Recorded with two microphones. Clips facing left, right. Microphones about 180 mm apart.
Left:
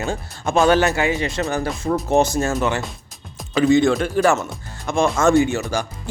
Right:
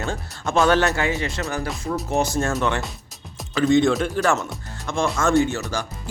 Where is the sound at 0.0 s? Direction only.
10° left (ahead or behind).